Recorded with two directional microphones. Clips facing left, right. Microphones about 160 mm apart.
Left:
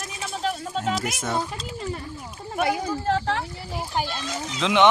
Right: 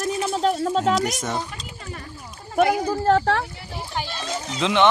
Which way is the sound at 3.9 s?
45° left (ahead or behind).